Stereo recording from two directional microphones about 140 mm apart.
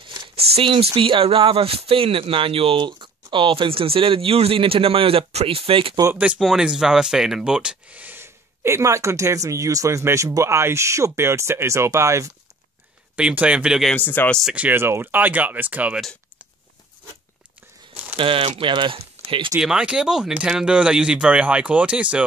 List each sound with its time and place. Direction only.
0.0 s speech: 35° right (ahead or behind)
6.1 s speech: 10° right (ahead or behind)
13.1 s speech: 10° right (ahead or behind)
13.9 s speech: 15° left (ahead or behind)
14.4 s speech: 10° right (ahead or behind)
18.1 s speech: 40° right (ahead or behind)
19.6 s speech: 5° right (ahead or behind)